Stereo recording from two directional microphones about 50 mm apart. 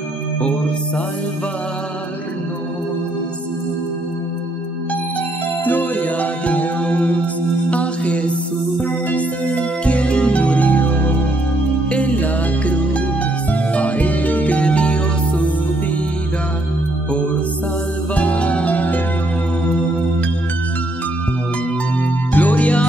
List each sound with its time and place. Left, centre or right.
5.7 s music: left
7.7 s mantra: left
8.8 s music: left
18.1 s music: left
22.3 s music: left